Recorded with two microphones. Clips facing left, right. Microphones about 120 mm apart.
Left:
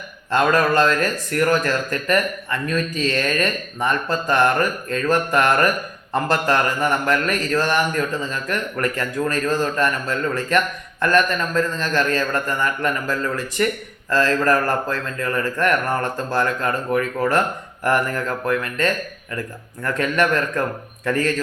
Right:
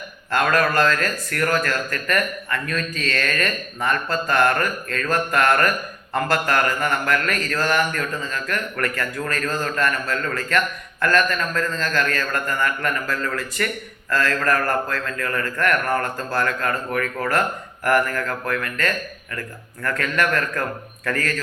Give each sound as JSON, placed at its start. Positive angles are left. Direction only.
{"t": 0.3, "sound": "a man's voice", "side_deg": 20}